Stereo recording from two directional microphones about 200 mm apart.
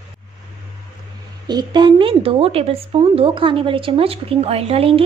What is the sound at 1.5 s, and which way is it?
A woman's voice, 20° right (ahead or behind).